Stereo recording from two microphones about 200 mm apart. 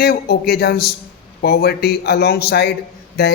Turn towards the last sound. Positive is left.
turn(degrees=55)  # may be behind; listen again after turning